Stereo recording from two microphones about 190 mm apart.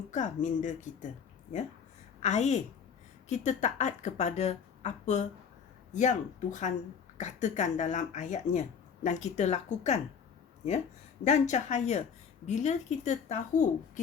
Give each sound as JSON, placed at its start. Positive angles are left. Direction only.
{"t": 0.1, "sound": "speech", "side_deg": 40}
{"t": 2.2, "sound": "speech", "side_deg": 35}
{"t": 11.2, "sound": "speech", "side_deg": 40}